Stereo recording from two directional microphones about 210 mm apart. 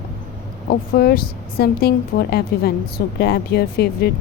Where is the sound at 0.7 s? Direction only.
45° left (ahead or behind).